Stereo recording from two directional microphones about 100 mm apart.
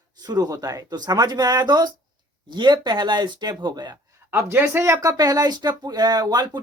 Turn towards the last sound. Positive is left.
turn(degrees=-40)  # may be behind; listen again after turning